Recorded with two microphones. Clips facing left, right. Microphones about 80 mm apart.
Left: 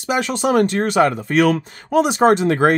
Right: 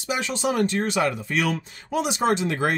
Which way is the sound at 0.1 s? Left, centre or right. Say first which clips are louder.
Left 7 dB; left.